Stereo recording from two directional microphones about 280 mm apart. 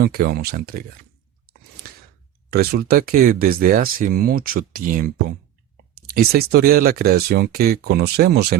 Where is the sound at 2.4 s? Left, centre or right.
Right.